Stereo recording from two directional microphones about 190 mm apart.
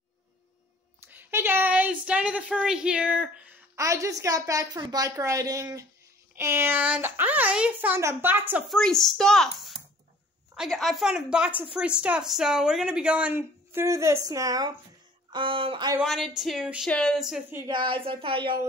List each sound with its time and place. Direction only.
1.0 s a woman's voice: 10° right (ahead or behind)
8.7 s a woman's voice: centre (ahead or behind); by 16.0 s 25° right (ahead or behind)
16.0 s speech: centre (ahead or behind)
17.6 s speech: 25° right (ahead or behind)